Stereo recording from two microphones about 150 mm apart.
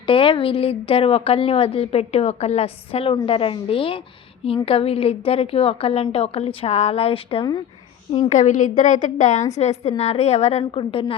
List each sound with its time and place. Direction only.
0.0 s a woman's voice: 35° left (ahead or behind)
8.3 s a woman's voice: 55° left (ahead or behind); by 11.0 s 35° left (ahead or behind)